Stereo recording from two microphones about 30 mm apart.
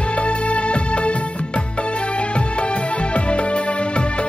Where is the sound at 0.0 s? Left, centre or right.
Left.